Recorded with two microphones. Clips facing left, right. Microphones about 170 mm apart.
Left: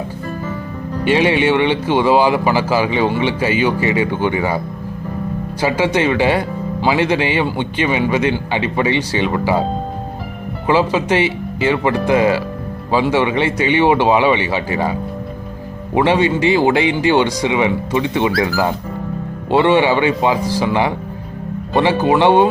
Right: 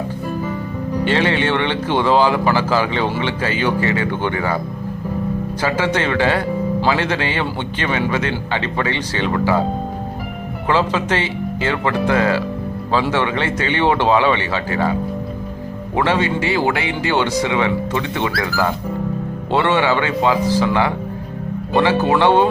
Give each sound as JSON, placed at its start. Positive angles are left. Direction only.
{"t": 1.0, "sound": "speech", "side_deg": 15}
{"t": 5.6, "sound": "speech", "side_deg": 10}
{"t": 10.7, "sound": "speech", "side_deg": 10}
{"t": 16.0, "sound": "speech", "side_deg": 20}